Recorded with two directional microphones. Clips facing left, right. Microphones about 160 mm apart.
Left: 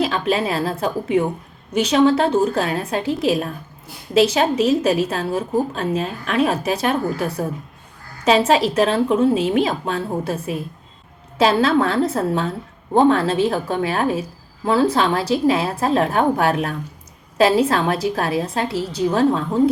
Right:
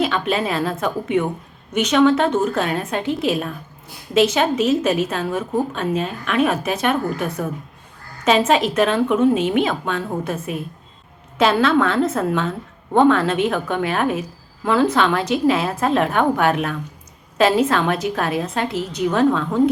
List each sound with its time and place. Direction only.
0.0 s a woman's voice: 35° left (ahead or behind)